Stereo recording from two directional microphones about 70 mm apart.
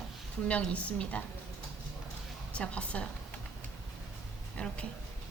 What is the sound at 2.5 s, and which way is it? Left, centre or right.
Speech, centre.